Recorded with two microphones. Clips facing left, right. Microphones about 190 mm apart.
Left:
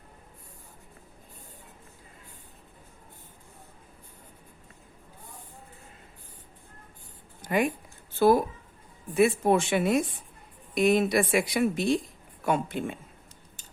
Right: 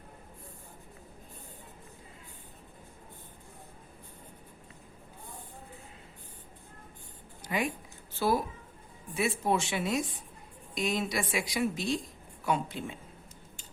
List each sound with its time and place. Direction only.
7.4 s speech: 50° left (ahead or behind)